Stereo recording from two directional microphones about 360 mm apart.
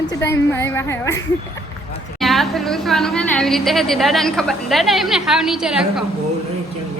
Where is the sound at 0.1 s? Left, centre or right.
Centre.